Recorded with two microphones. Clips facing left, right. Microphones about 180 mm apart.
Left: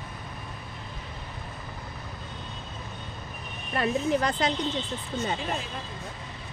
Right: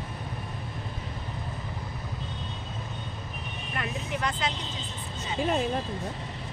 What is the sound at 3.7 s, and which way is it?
Speech, 35° left (ahead or behind).